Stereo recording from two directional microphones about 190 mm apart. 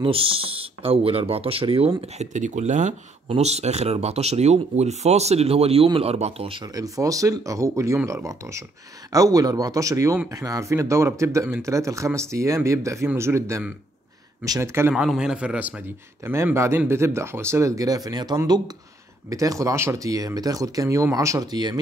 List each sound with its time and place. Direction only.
0.0 s a man's voice: 30° right (ahead or behind)